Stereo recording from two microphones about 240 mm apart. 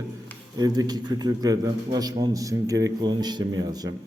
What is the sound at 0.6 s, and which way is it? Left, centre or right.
A man's voice, centre.